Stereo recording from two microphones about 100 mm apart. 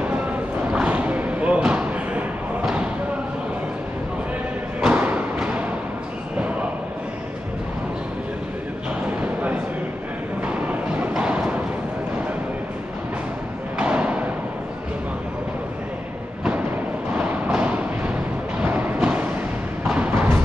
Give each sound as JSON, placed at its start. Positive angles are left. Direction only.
{"t": 0.7, "sound": "a sound", "side_deg": -15}
{"t": 4.8, "sound": "thump", "side_deg": -15}
{"t": 10.4, "sound": "music", "side_deg": -15}
{"t": 13.7, "sound": "thump", "side_deg": -10}
{"t": 17.2, "sound": "a sound", "side_deg": -15}
{"t": 18.6, "sound": "music", "side_deg": -15}